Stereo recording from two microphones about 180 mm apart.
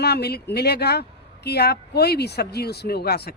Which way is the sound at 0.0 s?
65° left (ahead or behind).